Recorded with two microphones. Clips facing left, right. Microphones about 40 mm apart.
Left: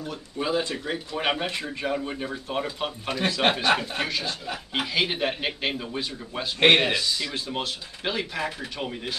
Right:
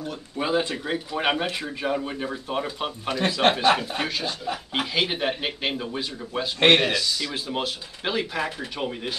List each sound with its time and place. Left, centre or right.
0.4 s speech: centre
6.8 s speech: left
7.2 s speech: centre